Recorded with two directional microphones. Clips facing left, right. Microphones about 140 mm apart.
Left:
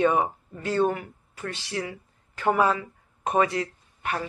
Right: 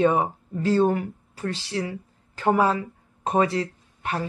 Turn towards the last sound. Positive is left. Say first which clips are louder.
# right 2 dB
turn(degrees=-30)  # may be behind; listen again after turning